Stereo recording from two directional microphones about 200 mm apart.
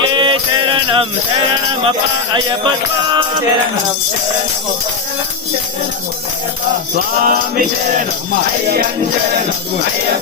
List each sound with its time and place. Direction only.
0.1 s music: 25° right (ahead or behind)
6.9 s music: 45° right (ahead or behind)